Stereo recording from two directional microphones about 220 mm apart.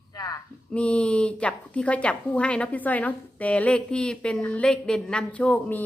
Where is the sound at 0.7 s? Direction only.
5° left (ahead or behind).